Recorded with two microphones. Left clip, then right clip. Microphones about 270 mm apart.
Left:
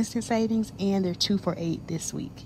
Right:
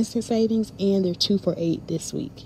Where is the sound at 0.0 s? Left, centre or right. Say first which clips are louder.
Right 4 dB; centre.